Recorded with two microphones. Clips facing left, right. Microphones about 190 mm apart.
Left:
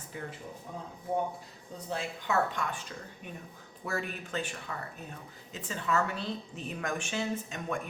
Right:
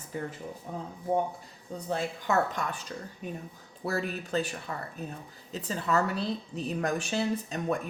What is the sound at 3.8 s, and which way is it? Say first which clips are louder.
A woman's voice: right 4 dB; 35° right (ahead or behind).